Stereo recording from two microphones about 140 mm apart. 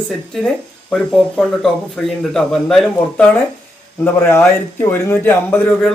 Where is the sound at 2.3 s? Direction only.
5° left (ahead or behind).